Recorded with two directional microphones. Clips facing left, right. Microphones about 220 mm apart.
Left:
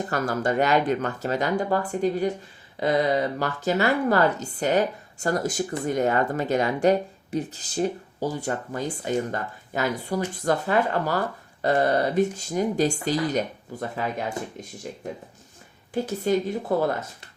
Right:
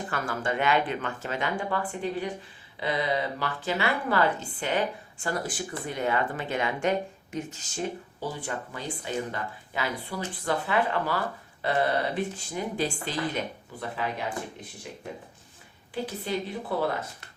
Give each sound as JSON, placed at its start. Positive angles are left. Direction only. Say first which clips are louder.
{"t": 0.1, "sound": "a woman's voice", "louder": "left 5 dB", "side_deg": 40}